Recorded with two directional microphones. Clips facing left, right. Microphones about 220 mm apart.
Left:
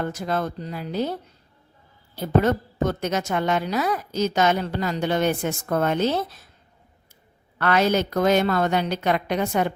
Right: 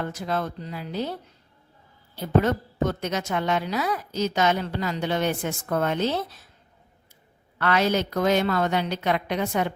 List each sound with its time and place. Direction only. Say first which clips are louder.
0.0 s a woman's voice: left 2 dB; 45° left (ahead or behind)
2.2 s a woman's voice: left 2 dB; 45° left (ahead or behind)
7.6 s a woman's voice: left 2 dB; 50° left (ahead or behind)